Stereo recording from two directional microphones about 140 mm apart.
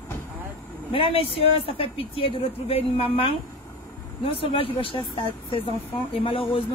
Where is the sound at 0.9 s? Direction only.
40° left (ahead or behind).